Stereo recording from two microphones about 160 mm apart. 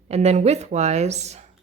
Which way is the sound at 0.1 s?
45° right (ahead or behind).